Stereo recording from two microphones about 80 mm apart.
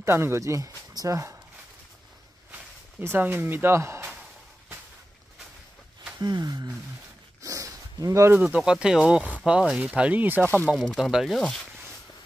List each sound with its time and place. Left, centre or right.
0.0 s speech: right
3.0 s speech: right
6.1 s speech: right
7.4 s a sound: right
8.4 s speech: centre
10.4 s speech: centre
10.8 s speech: centre
11.1 s speech: centre
11.3 s speech: centre